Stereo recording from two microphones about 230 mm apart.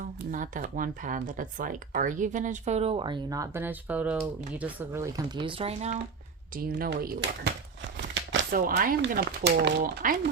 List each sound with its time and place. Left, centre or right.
0.0 s speech: right
6.6 s speech: right